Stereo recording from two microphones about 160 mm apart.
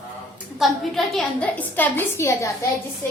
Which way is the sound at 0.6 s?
Centre (ahead or behind).